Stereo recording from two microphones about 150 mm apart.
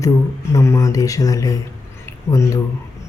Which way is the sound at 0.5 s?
20° left (ahead or behind).